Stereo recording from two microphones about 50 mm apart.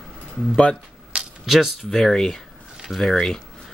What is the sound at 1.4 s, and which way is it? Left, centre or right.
Speech, centre.